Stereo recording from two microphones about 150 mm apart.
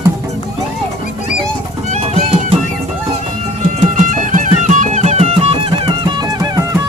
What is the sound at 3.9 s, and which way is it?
Music, 60° right (ahead or behind).